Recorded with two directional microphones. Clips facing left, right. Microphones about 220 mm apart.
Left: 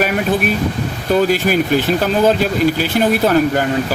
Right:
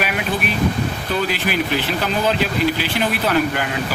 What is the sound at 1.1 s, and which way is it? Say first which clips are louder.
Speech: left 8 dB; 45° left (ahead or behind).